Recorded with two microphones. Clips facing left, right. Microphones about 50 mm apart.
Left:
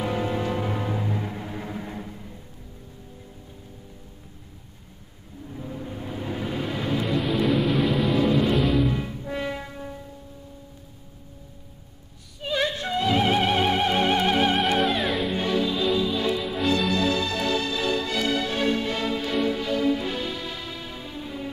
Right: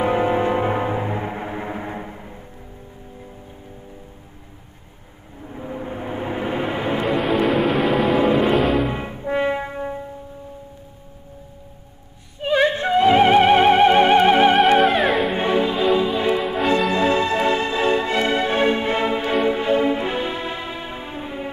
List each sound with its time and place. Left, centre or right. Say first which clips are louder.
0.0 s music: right 8 dB; right
5.4 s music: right 5 dB; right
7.4 s music: right 4 dB; centre
8.2 s music: right 4 dB; right
8.5 s music: right 4 dB; centre
8.8 s music: right 3 dB; right
12.4 s music: right 8 dB; right
14.8 s music: right 7 dB; centre
15.3 s music: right 5 dB; right